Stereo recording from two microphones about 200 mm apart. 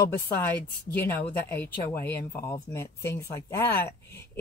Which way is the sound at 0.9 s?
10° left (ahead or behind).